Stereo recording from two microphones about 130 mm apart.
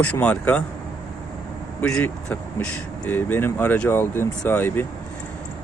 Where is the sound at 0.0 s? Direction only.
10° left (ahead or behind).